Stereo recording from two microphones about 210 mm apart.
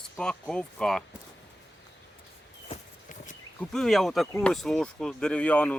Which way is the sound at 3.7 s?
Centre (ahead or behind).